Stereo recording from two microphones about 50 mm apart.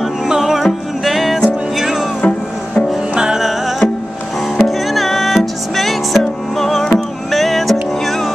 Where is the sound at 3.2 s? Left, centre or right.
Centre.